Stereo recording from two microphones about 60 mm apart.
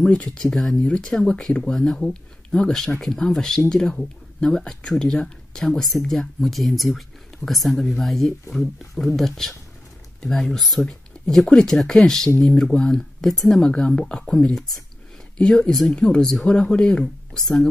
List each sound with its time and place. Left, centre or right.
0.0 s speech: centre
1.7 s speech: centre
13.7 s speech: centre